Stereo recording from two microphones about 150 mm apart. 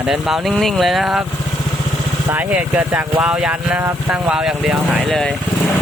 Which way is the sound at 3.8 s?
20° right (ahead or behind).